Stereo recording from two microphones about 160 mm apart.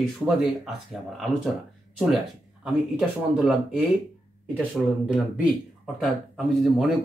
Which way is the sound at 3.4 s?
Centre (ahead or behind).